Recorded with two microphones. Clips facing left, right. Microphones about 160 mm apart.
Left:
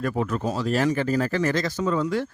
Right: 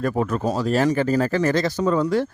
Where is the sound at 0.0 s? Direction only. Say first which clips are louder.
Right 3 dB; 45° right (ahead or behind).